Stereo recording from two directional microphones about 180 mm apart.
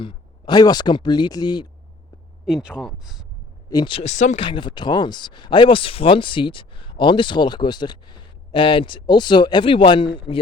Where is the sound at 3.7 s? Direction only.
25° left (ahead or behind).